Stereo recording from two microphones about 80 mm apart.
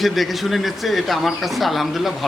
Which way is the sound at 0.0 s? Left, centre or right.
Centre.